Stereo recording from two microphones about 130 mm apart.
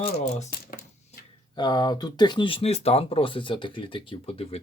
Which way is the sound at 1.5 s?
35° left (ahead or behind).